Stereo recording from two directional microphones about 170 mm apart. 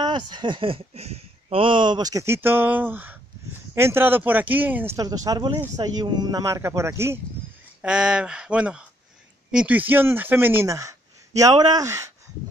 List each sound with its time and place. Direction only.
0.0 s speech: 25° right (ahead or behind); by 4.9 s 10° right (ahead or behind)
4.9 s speech: 20° right (ahead or behind)
7.8 s speech: 5° right (ahead or behind)